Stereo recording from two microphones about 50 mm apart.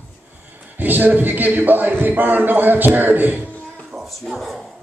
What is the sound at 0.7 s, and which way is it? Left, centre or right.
A man's voice, right.